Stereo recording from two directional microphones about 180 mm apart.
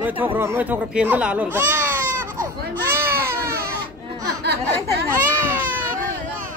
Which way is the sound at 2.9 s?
15° right (ahead or behind).